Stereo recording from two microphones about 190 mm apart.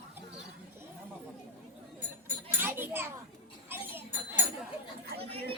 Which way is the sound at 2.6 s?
10° right (ahead or behind).